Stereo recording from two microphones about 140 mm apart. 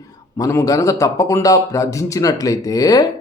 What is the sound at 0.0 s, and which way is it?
Speech, 25° left (ahead or behind).